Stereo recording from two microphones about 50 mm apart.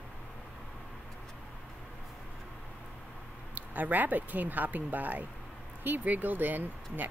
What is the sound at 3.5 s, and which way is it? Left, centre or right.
Speech, right.